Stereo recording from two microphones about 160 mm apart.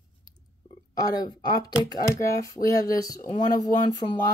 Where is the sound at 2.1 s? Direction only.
20° left (ahead or behind).